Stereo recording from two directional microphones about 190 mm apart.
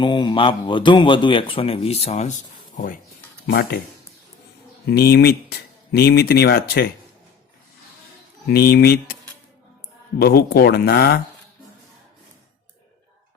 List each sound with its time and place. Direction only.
0.0 s a man's voice: 25° left (ahead or behind)
3.4 s speech: 55° left (ahead or behind)
4.9 s speech: 55° left (ahead or behind)
8.4 s speech: 55° left (ahead or behind)
10.2 s speech: 55° left (ahead or behind)